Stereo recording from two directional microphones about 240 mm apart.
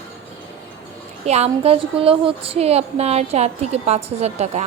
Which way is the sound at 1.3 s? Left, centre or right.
Right.